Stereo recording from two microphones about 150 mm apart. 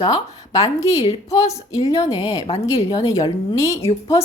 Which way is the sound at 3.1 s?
20° left (ahead or behind).